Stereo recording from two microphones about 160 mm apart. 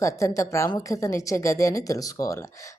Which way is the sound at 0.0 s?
20° left (ahead or behind).